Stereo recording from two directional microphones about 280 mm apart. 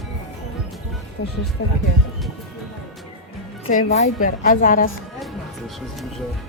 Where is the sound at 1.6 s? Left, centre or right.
Left.